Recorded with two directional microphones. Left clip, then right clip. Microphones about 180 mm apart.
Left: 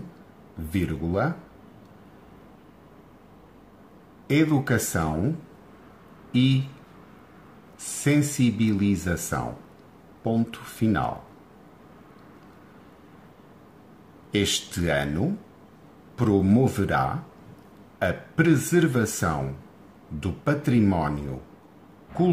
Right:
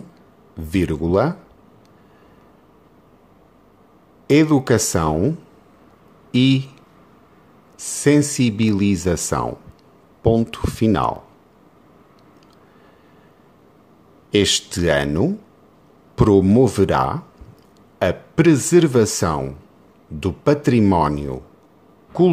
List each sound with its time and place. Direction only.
0.7 s speech: 55° right (ahead or behind)
4.3 s speech: 55° right (ahead or behind)
6.3 s speech: 55° right (ahead or behind)
7.8 s speech: 50° right (ahead or behind)
14.3 s speech: 55° right (ahead or behind)